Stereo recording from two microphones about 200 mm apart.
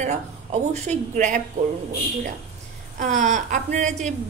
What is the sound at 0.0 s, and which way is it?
A woman's voice, 35° right (ahead or behind).